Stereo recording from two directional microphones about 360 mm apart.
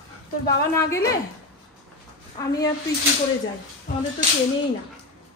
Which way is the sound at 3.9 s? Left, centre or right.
Left.